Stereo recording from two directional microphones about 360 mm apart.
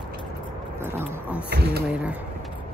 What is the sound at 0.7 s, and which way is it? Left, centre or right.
Speech, centre.